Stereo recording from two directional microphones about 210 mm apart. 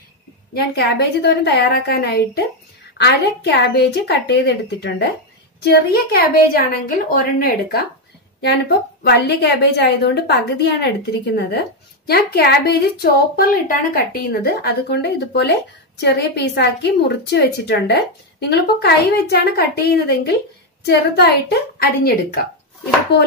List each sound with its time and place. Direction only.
0.6 s a woman's voice: 50° left (ahead or behind)
12.1 s a woman's voice: 50° left (ahead or behind)